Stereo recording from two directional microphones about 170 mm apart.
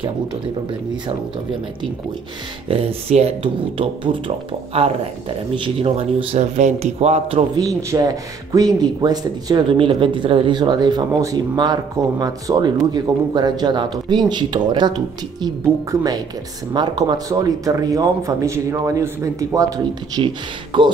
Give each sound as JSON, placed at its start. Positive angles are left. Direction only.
{"t": 2.7, "sound": "speech", "side_deg": -35}
{"t": 5.5, "sound": "speech", "side_deg": -30}
{"t": 7.5, "sound": "speech", "side_deg": -20}